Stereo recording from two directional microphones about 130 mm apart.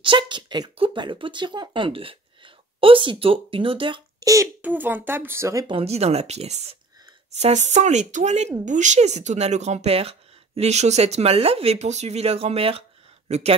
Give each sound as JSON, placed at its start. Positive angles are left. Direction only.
{"t": 0.0, "sound": "speech", "side_deg": -40}
{"t": 4.2, "sound": "a child's voice", "side_deg": -25}
{"t": 4.6, "sound": "speech", "side_deg": -15}
{"t": 5.7, "sound": "speech", "side_deg": -50}